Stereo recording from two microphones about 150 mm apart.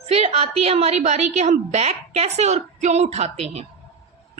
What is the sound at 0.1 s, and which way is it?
A woman's voice, 40° right (ahead or behind).